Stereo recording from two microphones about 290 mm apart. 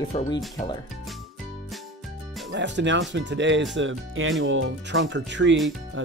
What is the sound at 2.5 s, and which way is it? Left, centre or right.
Speech, right.